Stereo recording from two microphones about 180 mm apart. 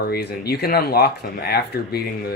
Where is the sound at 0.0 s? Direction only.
60° left (ahead or behind).